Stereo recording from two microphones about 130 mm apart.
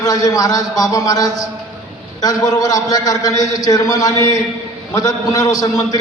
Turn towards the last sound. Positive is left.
turn(degrees=30)  # may be behind; listen again after turning